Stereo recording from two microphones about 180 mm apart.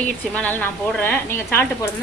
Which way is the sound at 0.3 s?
10° left (ahead or behind).